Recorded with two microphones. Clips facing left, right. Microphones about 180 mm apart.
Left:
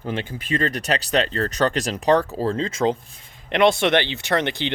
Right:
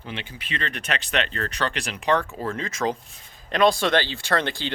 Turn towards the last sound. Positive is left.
turn(degrees=20)  # may be behind; listen again after turning